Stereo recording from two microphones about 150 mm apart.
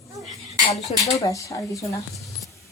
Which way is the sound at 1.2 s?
20° left (ahead or behind).